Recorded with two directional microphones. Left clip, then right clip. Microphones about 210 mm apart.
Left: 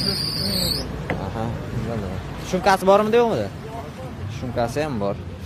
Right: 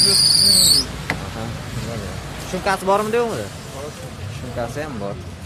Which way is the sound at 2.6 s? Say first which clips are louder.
Left 3 dB; 20° left (ahead or behind).